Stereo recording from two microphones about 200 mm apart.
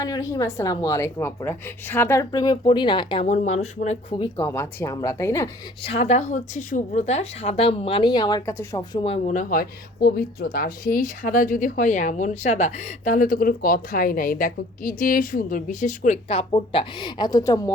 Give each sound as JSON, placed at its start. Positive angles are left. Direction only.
{"t": 0.0, "sound": "a woman's voice", "side_deg": 15}
{"t": 3.2, "sound": "speech", "side_deg": 35}
{"t": 4.2, "sound": "a woman's voice", "side_deg": 15}
{"t": 5.8, "sound": "speech", "side_deg": 30}